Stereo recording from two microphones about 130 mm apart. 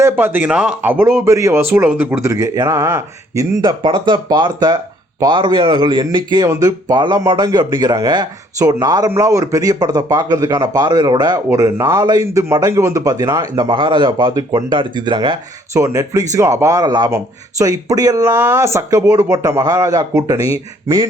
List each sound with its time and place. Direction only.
0.0 s speech: 15° right (ahead or behind)
3.6 s a man's voice: 40° right (ahead or behind)
11.5 s speech: 25° right (ahead or behind)
15.7 s speech: 20° right (ahead or behind)